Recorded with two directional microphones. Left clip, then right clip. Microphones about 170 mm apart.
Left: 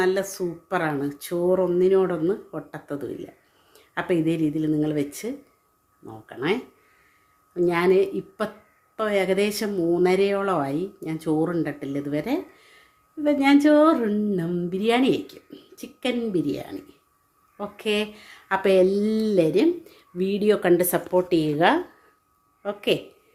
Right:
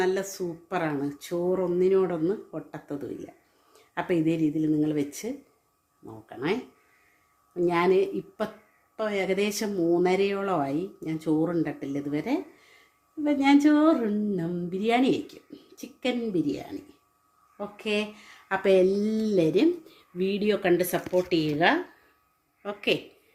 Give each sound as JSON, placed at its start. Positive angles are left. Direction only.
{"t": 0.0, "sound": "a woman's voice", "side_deg": 10}